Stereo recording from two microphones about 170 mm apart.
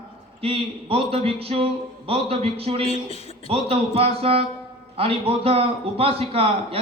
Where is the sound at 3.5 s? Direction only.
35° right (ahead or behind).